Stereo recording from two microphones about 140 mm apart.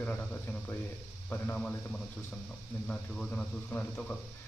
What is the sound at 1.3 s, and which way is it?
A man's voice, 10° left (ahead or behind).